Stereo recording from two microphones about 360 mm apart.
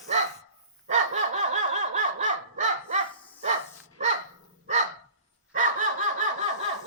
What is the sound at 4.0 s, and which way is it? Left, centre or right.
Dog, centre.